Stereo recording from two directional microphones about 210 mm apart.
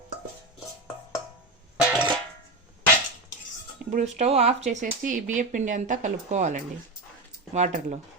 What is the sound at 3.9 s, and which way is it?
Speech, 30° right (ahead or behind).